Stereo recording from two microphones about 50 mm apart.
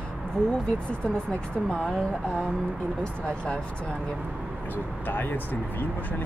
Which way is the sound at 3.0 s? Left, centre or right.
Left.